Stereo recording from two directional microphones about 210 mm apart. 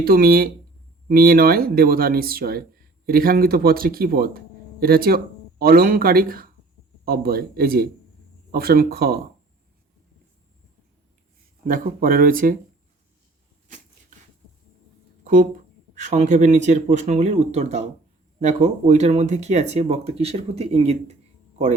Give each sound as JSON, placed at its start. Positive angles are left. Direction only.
{"t": 0.0, "sound": "speech", "side_deg": -45}
{"t": 11.6, "sound": "speech", "side_deg": -40}
{"t": 16.0, "sound": "speech", "side_deg": -35}